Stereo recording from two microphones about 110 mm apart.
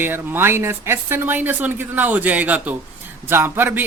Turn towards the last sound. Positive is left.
turn(degrees=-20)  # may be behind; listen again after turning